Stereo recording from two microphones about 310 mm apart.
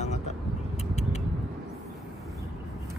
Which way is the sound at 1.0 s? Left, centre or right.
Left.